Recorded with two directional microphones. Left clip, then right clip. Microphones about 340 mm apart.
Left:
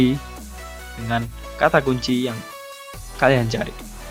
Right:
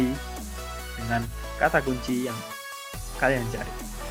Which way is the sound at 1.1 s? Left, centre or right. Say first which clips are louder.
Left 4 dB; left.